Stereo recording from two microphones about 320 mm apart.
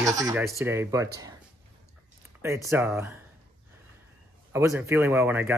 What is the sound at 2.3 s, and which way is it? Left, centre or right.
Speech, centre.